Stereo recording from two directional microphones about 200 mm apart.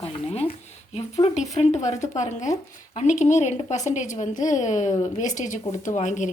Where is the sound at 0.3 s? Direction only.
30° left (ahead or behind).